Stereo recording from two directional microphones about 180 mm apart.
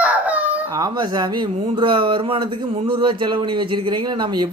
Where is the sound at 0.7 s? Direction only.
20° right (ahead or behind).